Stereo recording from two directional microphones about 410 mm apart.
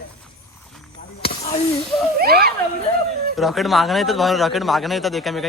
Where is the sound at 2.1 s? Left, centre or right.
Right.